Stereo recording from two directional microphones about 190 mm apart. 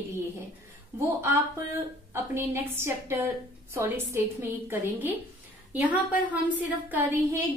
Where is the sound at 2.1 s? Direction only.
15° right (ahead or behind).